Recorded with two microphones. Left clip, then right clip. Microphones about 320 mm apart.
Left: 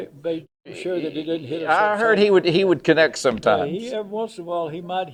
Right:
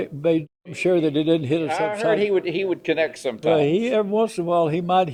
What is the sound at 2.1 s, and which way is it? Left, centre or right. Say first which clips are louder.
Speech: left 5 dB; left.